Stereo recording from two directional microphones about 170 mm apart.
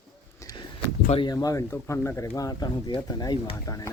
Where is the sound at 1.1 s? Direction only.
25° left (ahead or behind).